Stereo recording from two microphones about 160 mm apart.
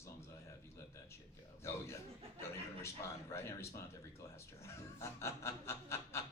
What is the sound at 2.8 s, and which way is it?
Speech, 15° left (ahead or behind).